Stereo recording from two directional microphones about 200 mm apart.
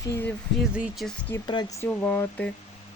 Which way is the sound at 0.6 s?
5° right (ahead or behind).